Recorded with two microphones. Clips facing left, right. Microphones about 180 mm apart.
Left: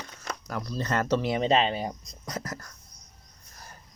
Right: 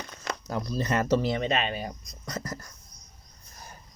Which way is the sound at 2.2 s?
15° left (ahead or behind).